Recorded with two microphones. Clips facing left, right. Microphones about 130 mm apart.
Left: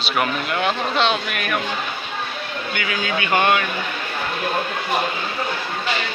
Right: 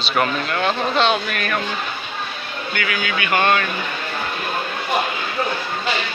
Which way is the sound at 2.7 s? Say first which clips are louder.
Right 1 dB; 25° left (ahead or behind).